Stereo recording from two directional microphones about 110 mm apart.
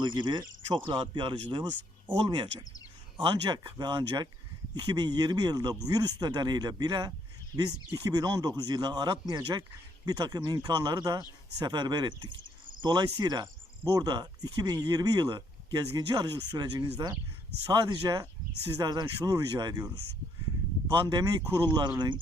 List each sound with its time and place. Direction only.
0.0 s speech: 45° right (ahead or behind)
20.9 s speech: 45° right (ahead or behind)